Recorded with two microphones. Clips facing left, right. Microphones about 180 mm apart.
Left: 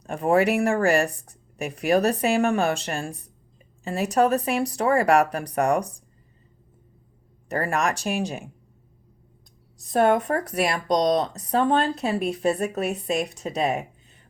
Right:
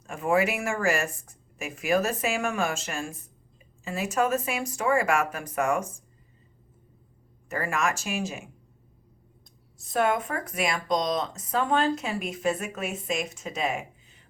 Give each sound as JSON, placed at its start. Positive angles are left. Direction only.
{"t": 0.0, "sound": "speech", "side_deg": 35}
{"t": 7.4, "sound": "speech", "side_deg": 35}
{"t": 9.7, "sound": "speech", "side_deg": 35}